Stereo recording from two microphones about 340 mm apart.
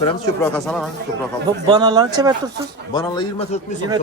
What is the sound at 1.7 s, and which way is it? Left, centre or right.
Speech, centre.